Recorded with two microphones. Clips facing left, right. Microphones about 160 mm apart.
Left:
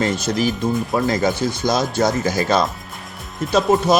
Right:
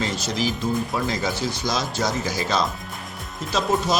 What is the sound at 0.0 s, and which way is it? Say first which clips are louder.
Speech: left 6 dB; 55° left (ahead or behind).